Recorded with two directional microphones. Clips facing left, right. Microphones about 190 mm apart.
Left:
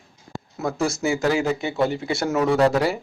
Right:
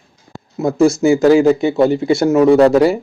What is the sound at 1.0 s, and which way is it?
Speech, 35° right (ahead or behind).